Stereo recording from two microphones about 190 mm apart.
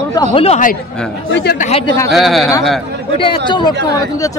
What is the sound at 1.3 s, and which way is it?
Speech, 70° left (ahead or behind).